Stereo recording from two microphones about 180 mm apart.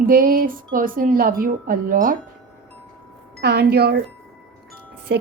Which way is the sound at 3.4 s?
65° right (ahead or behind).